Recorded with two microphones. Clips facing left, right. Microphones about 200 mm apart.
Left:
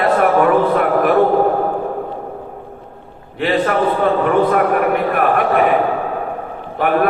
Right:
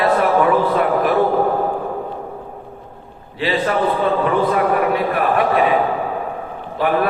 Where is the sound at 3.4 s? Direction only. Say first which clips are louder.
Left 2 dB; 55° left (ahead or behind).